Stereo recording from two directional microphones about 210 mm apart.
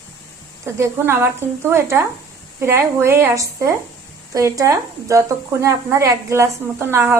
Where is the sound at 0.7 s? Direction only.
10° right (ahead or behind).